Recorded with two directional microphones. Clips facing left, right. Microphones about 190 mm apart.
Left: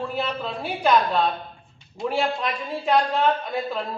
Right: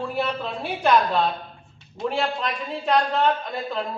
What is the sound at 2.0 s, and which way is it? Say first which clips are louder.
Speech: left 1 dB; 5° left (ahead or behind).